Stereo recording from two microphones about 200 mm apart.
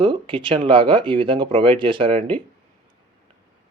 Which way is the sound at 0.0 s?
25° right (ahead or behind).